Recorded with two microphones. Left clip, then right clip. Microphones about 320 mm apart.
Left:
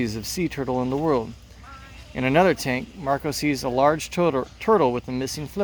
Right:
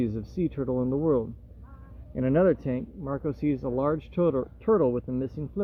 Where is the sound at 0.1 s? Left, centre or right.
Left.